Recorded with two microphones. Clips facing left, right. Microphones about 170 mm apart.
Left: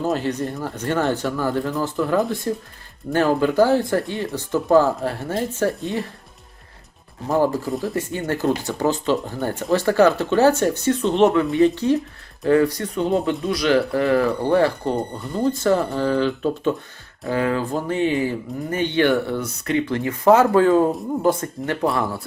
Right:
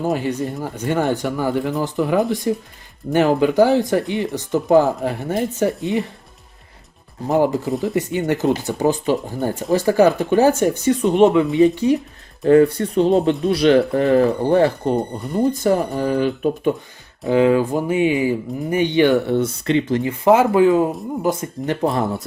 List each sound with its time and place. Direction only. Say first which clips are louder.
0.0 s speech: right 1 dB; 15° right (ahead or behind)
7.3 s speech: right 2 dB; 20° right (ahead or behind)
7.7 s speech: right 3 dB; centre (ahead or behind)
8.3 s speech: right 2 dB; 20° right (ahead or behind)
12.4 s speech: right 5 dB; 25° right (ahead or behind)
20.4 s speech: right 1 dB; 15° right (ahead or behind)
21.2 s speech: even; 20° right (ahead or behind)